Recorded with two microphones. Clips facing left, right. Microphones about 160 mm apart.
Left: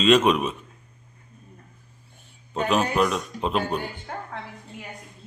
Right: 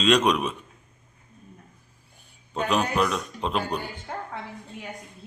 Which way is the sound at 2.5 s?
5° left (ahead or behind).